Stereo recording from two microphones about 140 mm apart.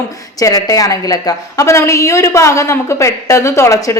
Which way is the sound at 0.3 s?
25° left (ahead or behind).